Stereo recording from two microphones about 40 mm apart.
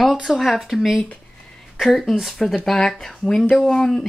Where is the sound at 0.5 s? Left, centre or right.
Centre.